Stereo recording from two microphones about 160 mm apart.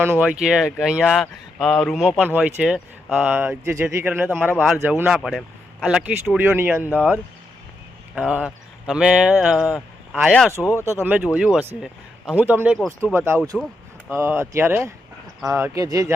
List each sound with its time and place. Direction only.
0.0 s speech: 10° right (ahead or behind)
4.5 s speech: centre (ahead or behind)
11.0 s speech: 10° right (ahead or behind)
12.8 s speech: centre (ahead or behind)
13.1 s speech: 15° right (ahead or behind)